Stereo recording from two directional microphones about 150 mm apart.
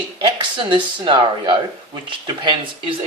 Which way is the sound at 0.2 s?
35° right (ahead or behind).